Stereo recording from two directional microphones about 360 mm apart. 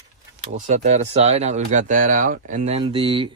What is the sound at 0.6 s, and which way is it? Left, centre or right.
Speech, centre.